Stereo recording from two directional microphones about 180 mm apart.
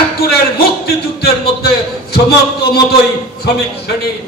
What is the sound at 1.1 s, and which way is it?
A man's voice, 60° left (ahead or behind).